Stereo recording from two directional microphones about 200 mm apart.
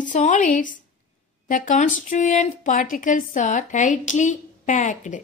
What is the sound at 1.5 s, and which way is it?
Speech, 40° left (ahead or behind).